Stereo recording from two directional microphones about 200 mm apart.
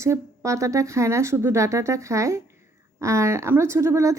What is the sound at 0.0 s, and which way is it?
Speech, 15° right (ahead or behind).